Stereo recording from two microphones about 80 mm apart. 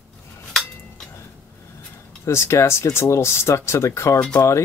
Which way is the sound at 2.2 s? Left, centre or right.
Left.